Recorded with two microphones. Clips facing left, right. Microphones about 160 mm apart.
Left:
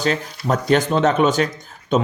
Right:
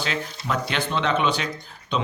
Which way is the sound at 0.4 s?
40° left (ahead or behind).